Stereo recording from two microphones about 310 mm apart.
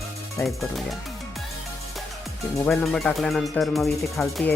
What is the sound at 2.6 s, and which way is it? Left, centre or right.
Speech, centre.